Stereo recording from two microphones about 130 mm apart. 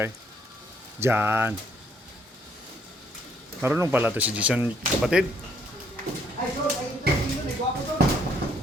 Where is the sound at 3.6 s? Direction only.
15° right (ahead or behind).